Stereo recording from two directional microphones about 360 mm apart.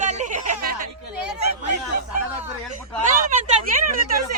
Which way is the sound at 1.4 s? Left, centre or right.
Right.